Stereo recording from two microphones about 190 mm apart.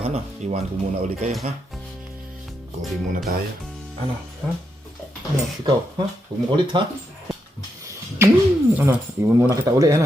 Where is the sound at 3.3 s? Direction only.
50° right (ahead or behind).